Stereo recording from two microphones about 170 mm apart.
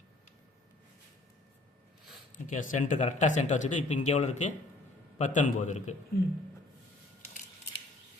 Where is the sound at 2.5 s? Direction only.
45° left (ahead or behind).